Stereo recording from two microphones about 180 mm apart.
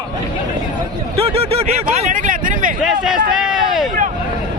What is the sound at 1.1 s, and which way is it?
Speech, 35° right (ahead or behind).